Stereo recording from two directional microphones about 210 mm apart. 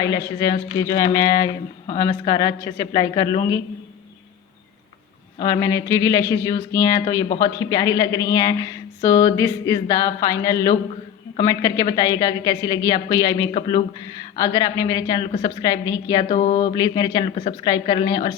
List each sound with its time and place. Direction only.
0.0 s a woman's voice: 15° left (ahead or behind)
5.4 s a woman's voice: 15° left (ahead or behind)
13.5 s speech: 30° left (ahead or behind)
14.4 s a woman's voice: 15° left (ahead or behind)
15.3 s mantra: 30° left (ahead or behind)
15.6 s speech: 20° left (ahead or behind)
16.3 s mantra: 35° left (ahead or behind)
16.7 s speech: 20° left (ahead or behind)